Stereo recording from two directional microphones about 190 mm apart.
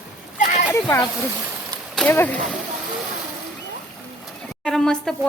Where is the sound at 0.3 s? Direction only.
40° left (ahead or behind).